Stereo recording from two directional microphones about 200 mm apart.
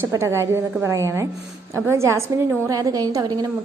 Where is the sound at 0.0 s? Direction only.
15° right (ahead or behind).